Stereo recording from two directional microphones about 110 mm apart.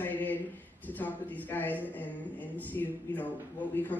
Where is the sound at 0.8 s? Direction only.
15° left (ahead or behind).